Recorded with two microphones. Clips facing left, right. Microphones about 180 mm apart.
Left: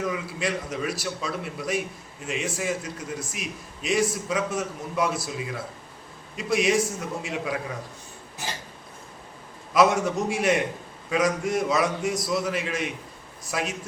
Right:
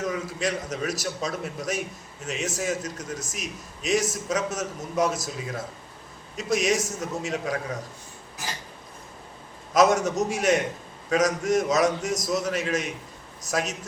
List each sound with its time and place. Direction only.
0.0 s a man's voice: 40° right (ahead or behind)
9.7 s a man's voice: 40° right (ahead or behind)